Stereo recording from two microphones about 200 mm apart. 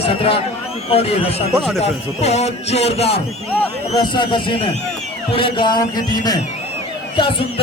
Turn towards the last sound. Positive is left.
turn(degrees=25)  # may be behind; listen again after turning